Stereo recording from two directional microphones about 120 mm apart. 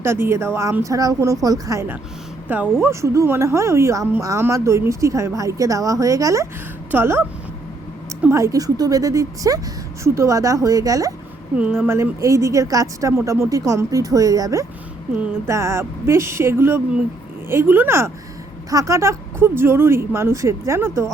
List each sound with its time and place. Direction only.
0.0 s speech: 20° right (ahead or behind)
8.3 s speech: 25° right (ahead or behind)
11.5 s speech: 10° right (ahead or behind)